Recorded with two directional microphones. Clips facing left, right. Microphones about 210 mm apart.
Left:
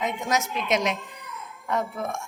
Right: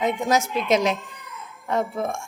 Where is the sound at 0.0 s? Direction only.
30° right (ahead or behind).